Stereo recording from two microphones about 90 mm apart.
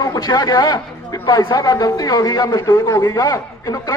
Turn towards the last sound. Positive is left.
turn(degrees=35)  # may be behind; listen again after turning